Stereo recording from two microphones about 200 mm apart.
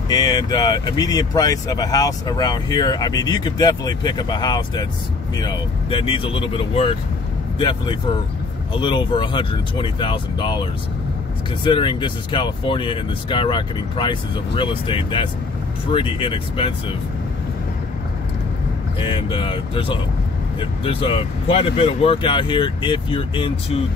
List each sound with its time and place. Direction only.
0.1 s speech: 20° left (ahead or behind)
18.9 s speech: 25° left (ahead or behind)